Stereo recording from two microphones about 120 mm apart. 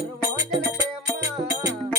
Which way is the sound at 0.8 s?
25° right (ahead or behind).